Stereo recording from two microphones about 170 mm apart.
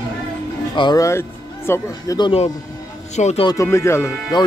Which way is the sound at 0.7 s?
25° left (ahead or behind).